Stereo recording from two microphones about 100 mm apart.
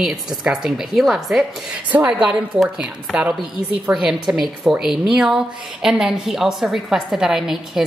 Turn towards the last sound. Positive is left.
turn(degrees=-5)  # may be behind; listen again after turning